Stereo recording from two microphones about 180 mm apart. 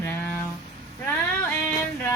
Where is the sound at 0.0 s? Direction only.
10° left (ahead or behind).